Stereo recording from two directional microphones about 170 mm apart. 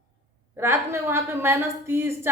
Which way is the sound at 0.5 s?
15° right (ahead or behind).